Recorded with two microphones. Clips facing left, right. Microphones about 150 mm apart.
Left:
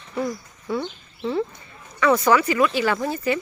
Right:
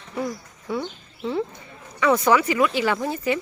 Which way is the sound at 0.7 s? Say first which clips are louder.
Left 1 dB; 10° right (ahead or behind).